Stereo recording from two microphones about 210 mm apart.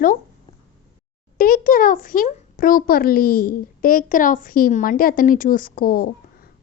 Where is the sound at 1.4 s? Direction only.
45° left (ahead or behind).